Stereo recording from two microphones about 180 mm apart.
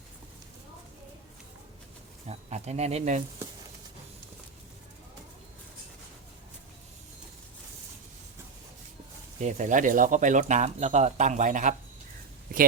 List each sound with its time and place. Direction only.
2.2 s speech: 35° right (ahead or behind)
9.4 s speech: 40° right (ahead or behind)